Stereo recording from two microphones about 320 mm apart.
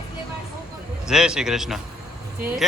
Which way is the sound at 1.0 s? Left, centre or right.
Centre.